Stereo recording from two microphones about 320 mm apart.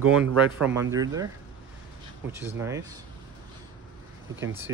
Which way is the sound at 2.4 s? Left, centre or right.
Centre.